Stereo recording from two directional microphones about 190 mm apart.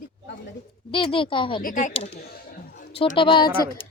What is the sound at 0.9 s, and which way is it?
Speech, 25° left (ahead or behind).